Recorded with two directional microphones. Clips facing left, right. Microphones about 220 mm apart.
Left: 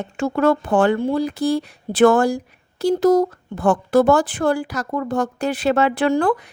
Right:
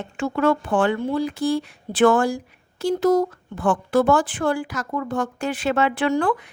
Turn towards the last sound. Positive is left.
turn(degrees=40)  # may be behind; listen again after turning